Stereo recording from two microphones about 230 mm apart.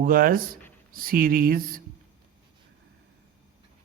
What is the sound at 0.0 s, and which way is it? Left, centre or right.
Speech, right.